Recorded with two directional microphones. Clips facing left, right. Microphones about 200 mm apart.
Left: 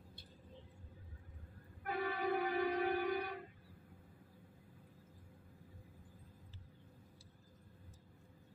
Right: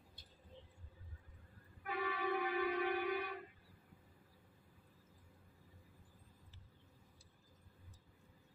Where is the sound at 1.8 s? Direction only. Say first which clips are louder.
Left 2 dB; 45° left (ahead or behind).